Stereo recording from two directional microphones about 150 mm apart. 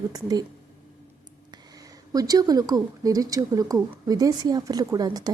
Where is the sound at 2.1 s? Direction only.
25° right (ahead or behind).